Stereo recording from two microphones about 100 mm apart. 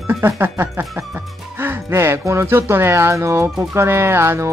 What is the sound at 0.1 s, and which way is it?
Speech, 25° right (ahead or behind).